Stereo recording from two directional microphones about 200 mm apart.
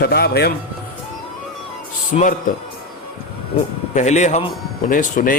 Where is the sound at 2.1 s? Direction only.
40° left (ahead or behind).